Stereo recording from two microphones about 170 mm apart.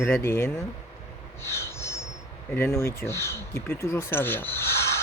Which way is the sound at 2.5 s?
15° left (ahead or behind).